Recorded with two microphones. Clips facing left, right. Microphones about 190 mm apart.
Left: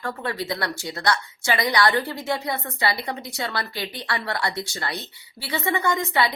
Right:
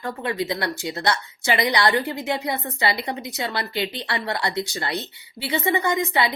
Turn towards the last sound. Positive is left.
turn(degrees=-20)  # may be behind; listen again after turning